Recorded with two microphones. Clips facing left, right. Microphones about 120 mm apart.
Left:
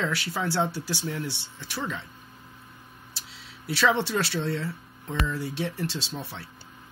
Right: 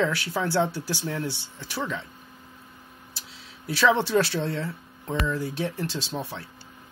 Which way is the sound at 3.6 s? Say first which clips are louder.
Right 2 dB; 50° right (ahead or behind).